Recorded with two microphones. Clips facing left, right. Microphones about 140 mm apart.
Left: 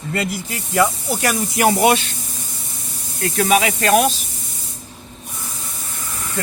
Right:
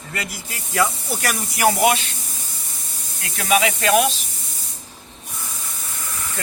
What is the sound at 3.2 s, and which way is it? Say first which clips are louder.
Speech: left 3 dB; 40° left (ahead or behind).